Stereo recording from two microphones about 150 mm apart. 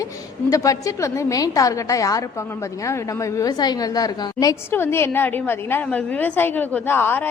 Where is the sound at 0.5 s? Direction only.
20° left (ahead or behind).